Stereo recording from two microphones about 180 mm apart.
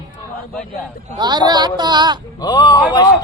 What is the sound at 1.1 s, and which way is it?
Speech, 25° right (ahead or behind).